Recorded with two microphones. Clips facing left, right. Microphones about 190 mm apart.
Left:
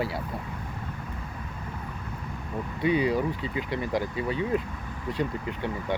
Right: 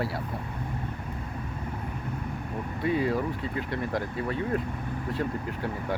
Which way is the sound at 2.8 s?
Centre (ahead or behind).